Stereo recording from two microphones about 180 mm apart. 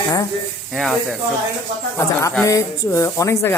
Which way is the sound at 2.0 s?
15° left (ahead or behind).